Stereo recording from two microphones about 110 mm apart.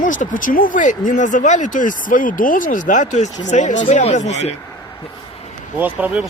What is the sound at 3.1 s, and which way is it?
Speech, 90° left.